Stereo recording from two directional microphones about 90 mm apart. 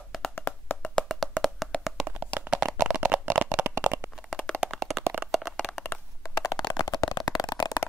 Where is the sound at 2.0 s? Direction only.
20° right (ahead or behind).